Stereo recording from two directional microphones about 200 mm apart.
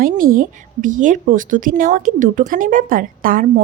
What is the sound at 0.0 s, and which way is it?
A woman's voice, 45° right (ahead or behind).